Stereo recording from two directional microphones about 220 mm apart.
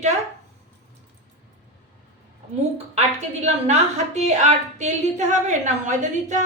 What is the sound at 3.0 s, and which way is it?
A woman's voice, 30° right (ahead or behind).